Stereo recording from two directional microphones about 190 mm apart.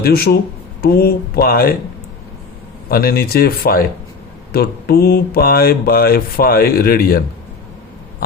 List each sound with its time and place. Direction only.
0.0 s speech: 55° left (ahead or behind)
2.9 s speech: 50° left (ahead or behind)